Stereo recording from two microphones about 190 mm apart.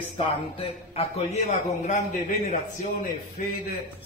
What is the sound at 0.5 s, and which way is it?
A man's voice, 30° left (ahead or behind).